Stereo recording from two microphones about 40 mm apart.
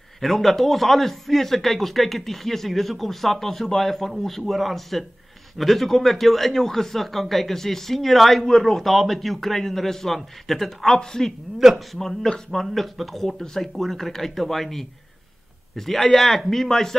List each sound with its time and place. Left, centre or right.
0.2 s a man's voice: centre
11.5 s a man's voice: centre